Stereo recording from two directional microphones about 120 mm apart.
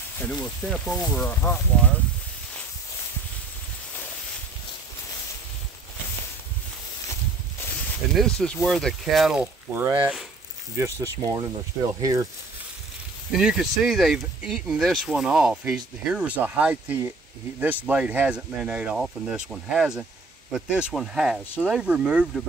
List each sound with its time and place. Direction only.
0.2 s speech: 10° left (ahead or behind)
8.1 s speech: 5° left (ahead or behind)
9.8 s speech: 15° right (ahead or behind)
10.8 s speech: 25° right (ahead or behind)
13.3 s speech: 5° right (ahead or behind)